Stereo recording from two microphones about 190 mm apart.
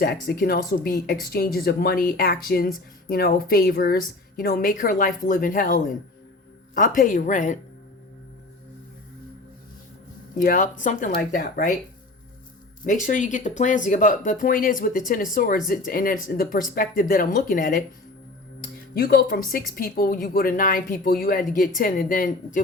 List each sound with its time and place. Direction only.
0.0 s speech: 55° left (ahead or behind)
10.3 s speech: 45° left (ahead or behind)
12.8 s speech: 45° left (ahead or behind)
18.9 s speech: 50° left (ahead or behind)